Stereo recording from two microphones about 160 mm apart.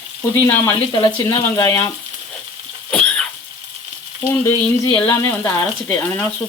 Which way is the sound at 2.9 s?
5° left (ahead or behind).